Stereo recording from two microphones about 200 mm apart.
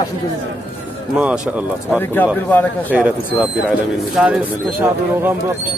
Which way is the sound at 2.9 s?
5° right (ahead or behind).